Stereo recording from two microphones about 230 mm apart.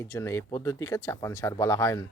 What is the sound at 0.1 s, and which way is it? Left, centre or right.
Speech, centre.